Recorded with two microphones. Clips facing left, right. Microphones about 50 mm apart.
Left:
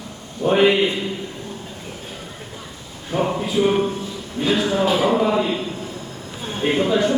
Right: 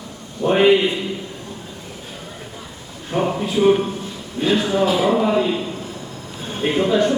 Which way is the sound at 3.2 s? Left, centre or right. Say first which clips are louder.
Right 2 dB; centre.